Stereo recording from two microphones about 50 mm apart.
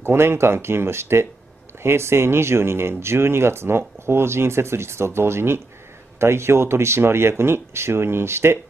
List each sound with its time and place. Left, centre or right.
0.0 s speech: right